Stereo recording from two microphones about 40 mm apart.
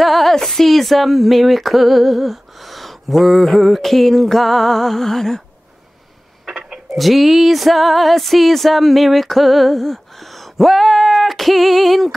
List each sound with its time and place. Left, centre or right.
0.0 s speech: centre
6.9 s speech: centre